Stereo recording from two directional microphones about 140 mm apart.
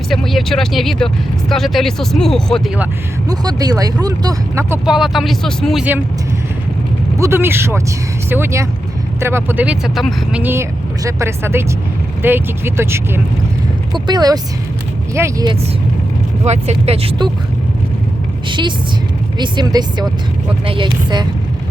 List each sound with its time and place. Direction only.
0.1 s speech: centre (ahead or behind)
3.2 s speech: 30° right (ahead or behind)
4.9 s speech: 5° right (ahead or behind)
7.2 s speech: 15° right (ahead or behind); by 10.4 s centre (ahead or behind)
10.4 s speech: 15° right (ahead or behind)
13.9 s speech: 30° right (ahead or behind)
16.4 s speech: 50° right (ahead or behind)
18.4 s speech: 35° right (ahead or behind)